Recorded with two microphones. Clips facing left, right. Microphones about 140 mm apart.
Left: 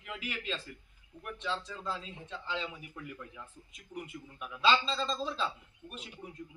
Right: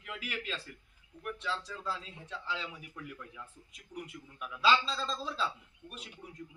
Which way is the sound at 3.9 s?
25° left (ahead or behind).